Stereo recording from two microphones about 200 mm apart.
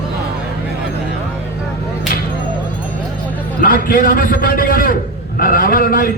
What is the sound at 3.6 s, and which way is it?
A man's voice, 45° left (ahead or behind).